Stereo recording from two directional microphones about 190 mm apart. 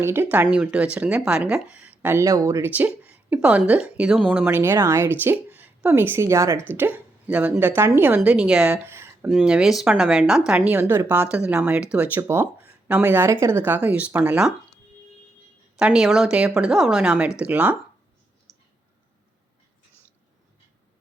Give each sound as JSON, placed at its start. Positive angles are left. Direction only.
{"t": 0.0, "sound": "speech", "side_deg": -10}
{"t": 4.4, "sound": "speech", "side_deg": -10}
{"t": 15.8, "sound": "speech", "side_deg": -5}
{"t": 18.5, "sound": "clicking", "side_deg": -15}